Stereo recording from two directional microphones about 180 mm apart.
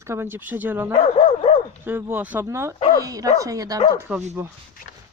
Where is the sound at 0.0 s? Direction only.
15° right (ahead or behind).